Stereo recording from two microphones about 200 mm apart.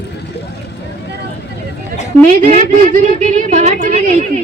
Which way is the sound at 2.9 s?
35° right (ahead or behind).